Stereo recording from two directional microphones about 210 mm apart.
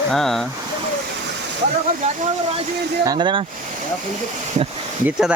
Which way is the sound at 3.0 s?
20° right (ahead or behind).